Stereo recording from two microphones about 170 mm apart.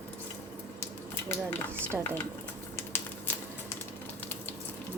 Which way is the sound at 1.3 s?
10° left (ahead or behind).